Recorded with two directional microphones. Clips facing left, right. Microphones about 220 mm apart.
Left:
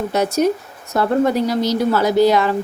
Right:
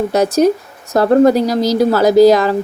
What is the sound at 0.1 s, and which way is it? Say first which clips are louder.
Speech: right 4 dB; 40° right (ahead or behind).